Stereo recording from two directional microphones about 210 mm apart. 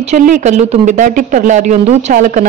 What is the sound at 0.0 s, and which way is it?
A woman's voice, 35° right (ahead or behind).